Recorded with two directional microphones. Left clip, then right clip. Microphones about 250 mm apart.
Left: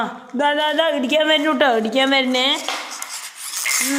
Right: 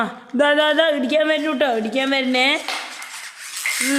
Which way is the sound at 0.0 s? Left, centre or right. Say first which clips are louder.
Right 1 dB; right.